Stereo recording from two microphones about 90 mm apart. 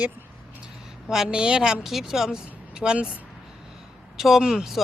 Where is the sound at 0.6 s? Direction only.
5° right (ahead or behind).